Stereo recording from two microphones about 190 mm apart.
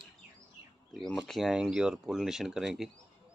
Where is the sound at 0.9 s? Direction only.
Centre (ahead or behind).